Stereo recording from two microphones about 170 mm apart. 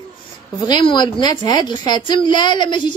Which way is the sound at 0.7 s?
25° left (ahead or behind).